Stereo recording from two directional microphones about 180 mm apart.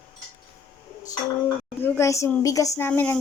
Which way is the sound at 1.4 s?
15° left (ahead or behind).